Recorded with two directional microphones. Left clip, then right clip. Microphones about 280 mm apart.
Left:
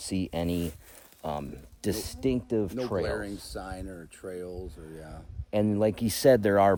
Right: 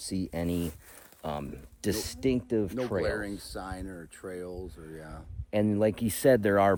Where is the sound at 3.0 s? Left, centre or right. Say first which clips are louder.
Even; centre.